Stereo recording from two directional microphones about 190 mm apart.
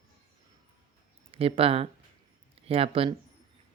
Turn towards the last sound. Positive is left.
turn(degrees=-30)  # may be behind; listen again after turning